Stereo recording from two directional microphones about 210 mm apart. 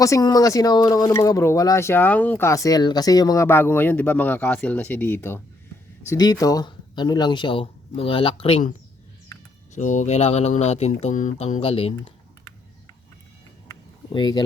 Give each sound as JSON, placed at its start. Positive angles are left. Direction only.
{"t": 0.0, "sound": "speech", "side_deg": 15}
{"t": 9.7, "sound": "speech", "side_deg": 35}
{"t": 13.7, "sound": "a sound", "side_deg": 20}